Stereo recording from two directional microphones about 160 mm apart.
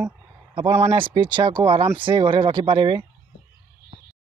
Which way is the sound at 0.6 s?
40° right (ahead or behind).